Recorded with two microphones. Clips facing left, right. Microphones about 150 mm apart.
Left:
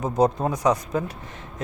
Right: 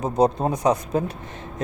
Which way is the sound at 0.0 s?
25° right (ahead or behind).